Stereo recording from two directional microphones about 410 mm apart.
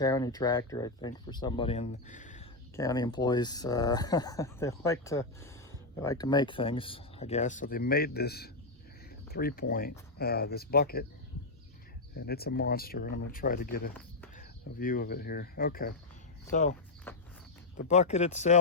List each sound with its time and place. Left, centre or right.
0.0 s speech: centre
12.1 s speech: left
17.1 s walk: centre
17.7 s speech: centre